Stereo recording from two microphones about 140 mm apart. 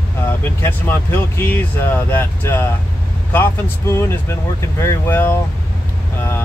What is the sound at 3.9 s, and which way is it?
Speech, 20° left (ahead or behind).